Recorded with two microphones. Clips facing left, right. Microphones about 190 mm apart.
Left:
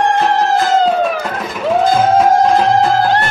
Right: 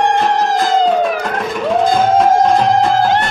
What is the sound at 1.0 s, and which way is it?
Music, centre (ahead or behind).